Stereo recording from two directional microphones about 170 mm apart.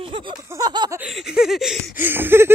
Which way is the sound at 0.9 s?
5° right (ahead or behind).